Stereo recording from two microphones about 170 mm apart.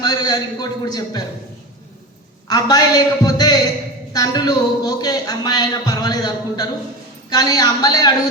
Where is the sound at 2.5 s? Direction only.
25° left (ahead or behind).